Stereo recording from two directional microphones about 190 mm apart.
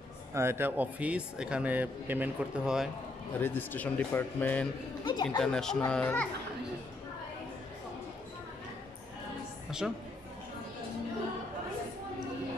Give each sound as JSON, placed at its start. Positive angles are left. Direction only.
{"t": 0.3, "sound": "a man's voice", "side_deg": -15}
{"t": 3.3, "sound": "speech", "side_deg": 10}
{"t": 5.0, "sound": "speech", "side_deg": 25}
{"t": 5.4, "sound": "speech", "side_deg": 5}
{"t": 9.7, "sound": "a woman's voice", "side_deg": -5}